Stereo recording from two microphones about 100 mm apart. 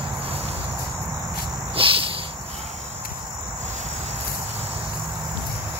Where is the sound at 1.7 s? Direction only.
60° right (ahead or behind).